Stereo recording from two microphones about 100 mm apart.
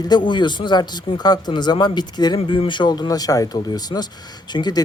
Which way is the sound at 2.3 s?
65° left (ahead or behind).